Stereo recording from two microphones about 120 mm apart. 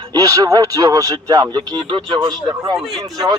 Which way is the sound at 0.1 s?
30° right (ahead or behind).